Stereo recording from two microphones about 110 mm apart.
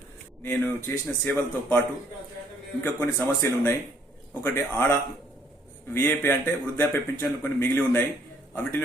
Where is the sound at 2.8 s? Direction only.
25° left (ahead or behind).